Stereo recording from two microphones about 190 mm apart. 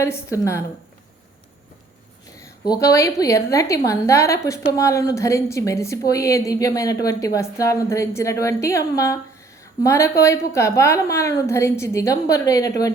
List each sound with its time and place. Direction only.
0.0 s a woman's voice: 15° left (ahead or behind)
2.6 s a woman's voice: 15° left (ahead or behind)